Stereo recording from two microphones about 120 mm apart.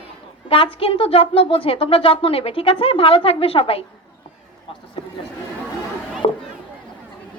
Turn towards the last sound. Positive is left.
turn(degrees=50)  # may be behind; listen again after turning